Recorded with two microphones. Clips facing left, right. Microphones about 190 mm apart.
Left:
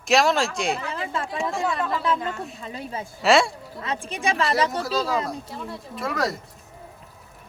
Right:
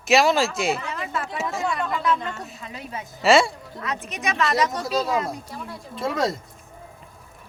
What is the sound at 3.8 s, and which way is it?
A woman's voice, 30° left (ahead or behind).